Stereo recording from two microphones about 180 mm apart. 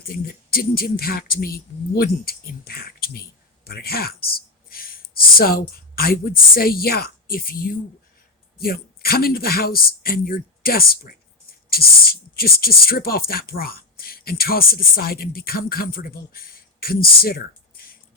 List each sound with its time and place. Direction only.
0.5 s speech: 55° left (ahead or behind)